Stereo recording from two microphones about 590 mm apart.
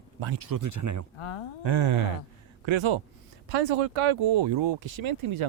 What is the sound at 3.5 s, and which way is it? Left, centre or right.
Speech, right.